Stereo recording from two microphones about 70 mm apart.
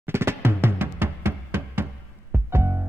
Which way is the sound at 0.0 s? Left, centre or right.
Right.